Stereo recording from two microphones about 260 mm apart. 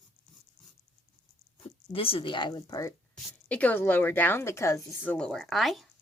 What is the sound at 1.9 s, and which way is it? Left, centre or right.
A woman's voice, left.